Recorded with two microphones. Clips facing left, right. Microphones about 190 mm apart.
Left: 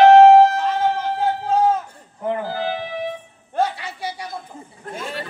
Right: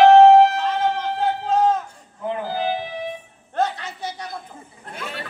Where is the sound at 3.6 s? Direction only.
10° left (ahead or behind).